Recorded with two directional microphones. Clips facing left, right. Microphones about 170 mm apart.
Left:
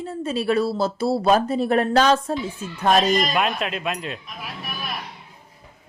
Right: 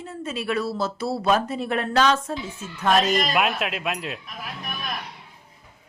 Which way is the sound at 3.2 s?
5° right (ahead or behind).